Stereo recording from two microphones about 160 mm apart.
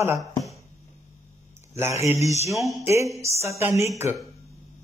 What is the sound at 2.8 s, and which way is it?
Speech, 20° right (ahead or behind).